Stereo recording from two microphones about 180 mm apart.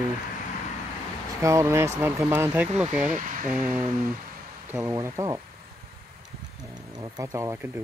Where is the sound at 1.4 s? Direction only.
15° right (ahead or behind).